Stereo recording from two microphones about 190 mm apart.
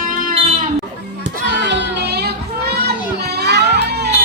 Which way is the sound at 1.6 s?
65° right (ahead or behind).